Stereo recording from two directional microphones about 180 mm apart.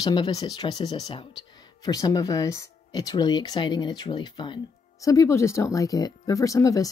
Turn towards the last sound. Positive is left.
turn(degrees=20)  # may be behind; listen again after turning